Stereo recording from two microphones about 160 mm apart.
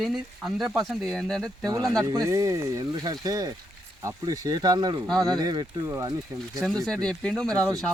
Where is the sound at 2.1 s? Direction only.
20° right (ahead or behind).